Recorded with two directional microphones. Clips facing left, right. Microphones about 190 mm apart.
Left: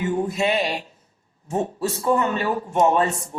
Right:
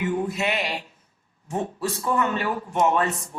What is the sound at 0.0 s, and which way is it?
Speech, 25° left (ahead or behind).